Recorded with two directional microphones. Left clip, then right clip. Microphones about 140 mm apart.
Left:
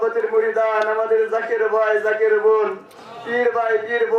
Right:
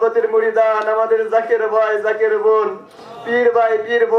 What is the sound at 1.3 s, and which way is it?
Speech, 25° right (ahead or behind).